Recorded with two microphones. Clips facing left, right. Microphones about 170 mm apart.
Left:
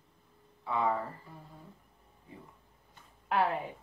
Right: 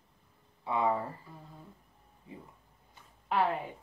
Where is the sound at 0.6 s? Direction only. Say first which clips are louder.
Right 1 dB; 20° right (ahead or behind).